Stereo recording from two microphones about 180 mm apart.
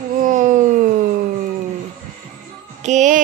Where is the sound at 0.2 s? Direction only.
45° right (ahead or behind).